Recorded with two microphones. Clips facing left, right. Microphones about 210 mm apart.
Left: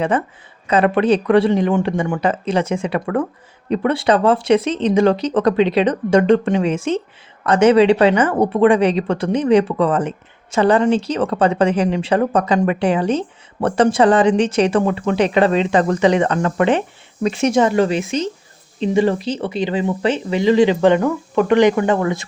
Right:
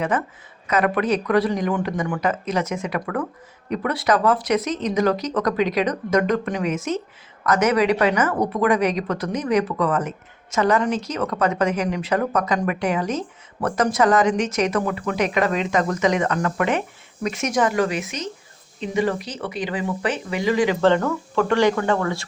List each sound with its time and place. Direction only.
0.7 s speech: 30° left (ahead or behind)
20.8 s speech: 15° left (ahead or behind)